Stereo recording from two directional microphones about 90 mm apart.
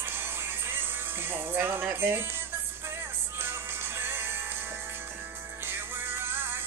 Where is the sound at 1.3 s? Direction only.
25° right (ahead or behind).